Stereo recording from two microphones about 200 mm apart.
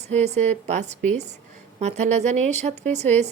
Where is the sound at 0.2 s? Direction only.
35° right (ahead or behind).